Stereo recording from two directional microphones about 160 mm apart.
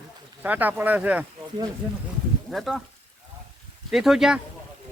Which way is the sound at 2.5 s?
Centre (ahead or behind).